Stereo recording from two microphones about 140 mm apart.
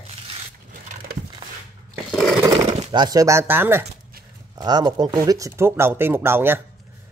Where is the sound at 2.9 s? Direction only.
30° right (ahead or behind).